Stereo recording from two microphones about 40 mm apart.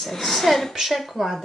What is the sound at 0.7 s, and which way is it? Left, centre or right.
Speech, centre.